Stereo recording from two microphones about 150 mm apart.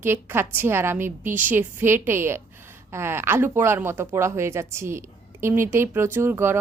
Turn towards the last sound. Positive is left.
turn(degrees=-15)  # may be behind; listen again after turning